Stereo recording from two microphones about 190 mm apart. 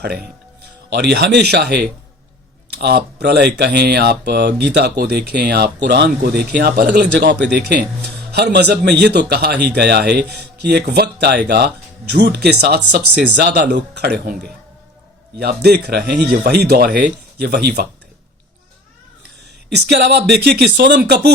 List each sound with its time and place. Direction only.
0.9 s speech: 60° right (ahead or behind)
19.7 s speech: 60° right (ahead or behind)